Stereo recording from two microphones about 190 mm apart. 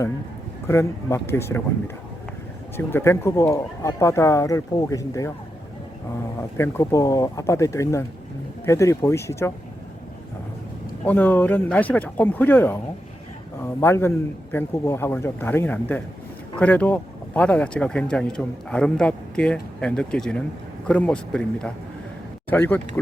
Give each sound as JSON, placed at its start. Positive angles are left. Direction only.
{"t": 0.7, "sound": "speech", "side_deg": 15}
{"t": 2.7, "sound": "speech", "side_deg": 10}
{"t": 6.6, "sound": "speech", "side_deg": 15}
{"t": 11.0, "sound": "speech", "side_deg": 10}